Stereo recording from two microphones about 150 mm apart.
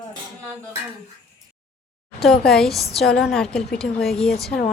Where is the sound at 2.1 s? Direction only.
Centre (ahead or behind).